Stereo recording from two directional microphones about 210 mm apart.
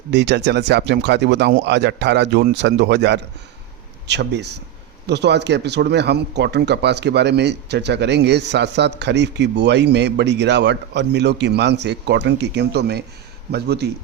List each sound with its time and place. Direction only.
0.1 s speech: 55° right (ahead or behind)